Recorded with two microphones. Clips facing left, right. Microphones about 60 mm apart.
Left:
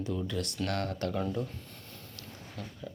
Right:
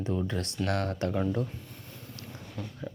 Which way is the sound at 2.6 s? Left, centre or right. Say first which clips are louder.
Right 3 dB; centre.